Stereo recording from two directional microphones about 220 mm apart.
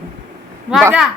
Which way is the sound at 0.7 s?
5° right (ahead or behind).